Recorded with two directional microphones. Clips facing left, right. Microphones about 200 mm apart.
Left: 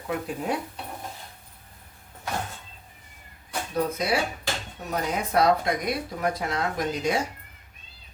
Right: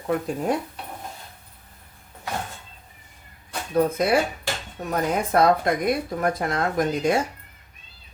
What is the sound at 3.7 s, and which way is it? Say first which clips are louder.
Speech: right 6 dB; 55° right (ahead or behind).